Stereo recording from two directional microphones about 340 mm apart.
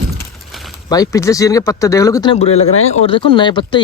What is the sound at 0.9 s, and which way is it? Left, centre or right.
Speech, centre.